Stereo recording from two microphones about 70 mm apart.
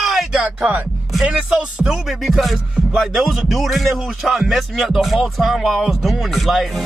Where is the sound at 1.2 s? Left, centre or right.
Centre.